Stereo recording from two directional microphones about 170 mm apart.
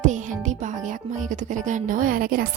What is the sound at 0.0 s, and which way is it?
Speech, 45° right (ahead or behind).